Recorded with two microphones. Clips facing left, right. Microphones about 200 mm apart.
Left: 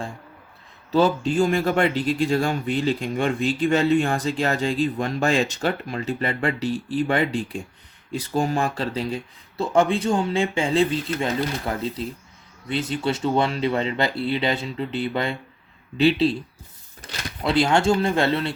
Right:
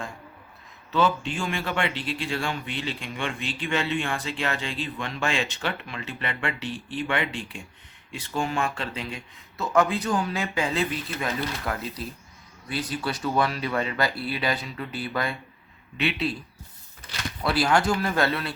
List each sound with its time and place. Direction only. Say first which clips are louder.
0.9 s a man's voice: left 5 dB; 40° left (ahead or behind)
17.4 s speech: left 4 dB; 25° left (ahead or behind)